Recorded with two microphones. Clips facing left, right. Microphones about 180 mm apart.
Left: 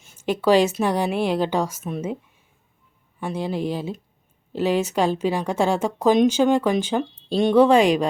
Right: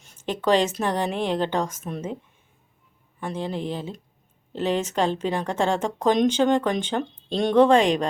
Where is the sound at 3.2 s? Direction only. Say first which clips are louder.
Left 3 dB; 10° left (ahead or behind).